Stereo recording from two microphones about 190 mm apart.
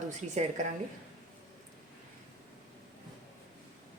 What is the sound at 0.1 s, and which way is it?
Speech, 40° right (ahead or behind).